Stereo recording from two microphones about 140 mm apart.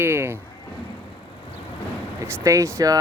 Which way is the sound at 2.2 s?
20° right (ahead or behind).